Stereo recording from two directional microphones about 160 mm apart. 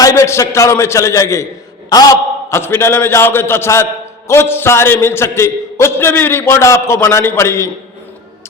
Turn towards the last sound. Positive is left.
turn(degrees=15)  # may be behind; listen again after turning